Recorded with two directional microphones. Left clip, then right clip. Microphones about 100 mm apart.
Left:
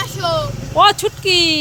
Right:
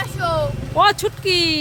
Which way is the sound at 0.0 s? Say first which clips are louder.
Left 2 dB; 40° right (ahead or behind).